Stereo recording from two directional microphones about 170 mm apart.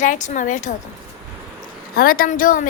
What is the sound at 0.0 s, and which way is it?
Speech, 45° left (ahead or behind).